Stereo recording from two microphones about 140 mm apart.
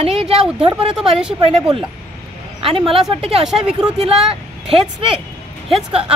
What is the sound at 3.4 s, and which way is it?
Speech, 5° right (ahead or behind).